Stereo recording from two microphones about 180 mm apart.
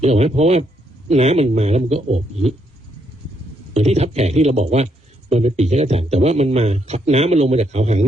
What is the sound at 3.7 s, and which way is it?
A man's voice, 35° right (ahead or behind).